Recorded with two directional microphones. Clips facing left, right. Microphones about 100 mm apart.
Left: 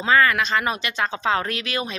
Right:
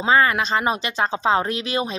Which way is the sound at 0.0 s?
25° right (ahead or behind).